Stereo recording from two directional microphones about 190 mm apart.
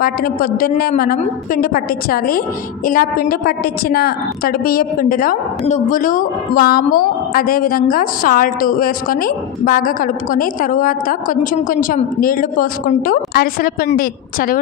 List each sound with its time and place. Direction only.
0.0 s a woman's voice: 50° left (ahead or behind)